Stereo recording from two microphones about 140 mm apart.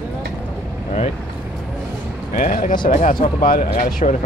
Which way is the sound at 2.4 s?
80° left.